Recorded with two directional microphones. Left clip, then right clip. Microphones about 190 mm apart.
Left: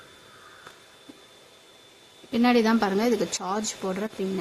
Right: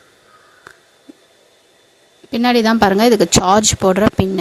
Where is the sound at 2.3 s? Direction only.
40° right (ahead or behind).